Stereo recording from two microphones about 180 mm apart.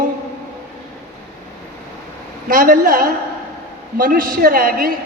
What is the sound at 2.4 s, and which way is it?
A man's voice, 50° right (ahead or behind).